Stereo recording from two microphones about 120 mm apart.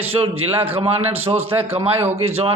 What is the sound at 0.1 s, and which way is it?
A man's voice, 55° right (ahead or behind).